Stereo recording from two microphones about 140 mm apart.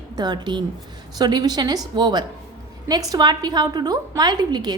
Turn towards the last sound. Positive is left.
turn(degrees=-30)  # may be behind; listen again after turning